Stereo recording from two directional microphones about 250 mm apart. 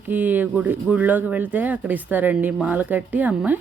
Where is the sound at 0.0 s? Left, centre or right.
Centre.